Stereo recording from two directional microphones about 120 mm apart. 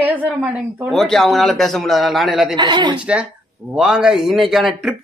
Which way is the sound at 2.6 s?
40° right (ahead or behind).